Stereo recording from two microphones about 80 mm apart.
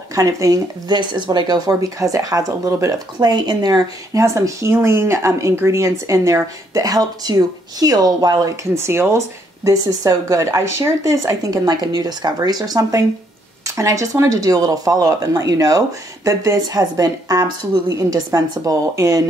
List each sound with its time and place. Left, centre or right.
0.1 s speech: right
4.2 s speech: right
8.7 s speech: right
9.7 s speech: right
13.7 s speech: right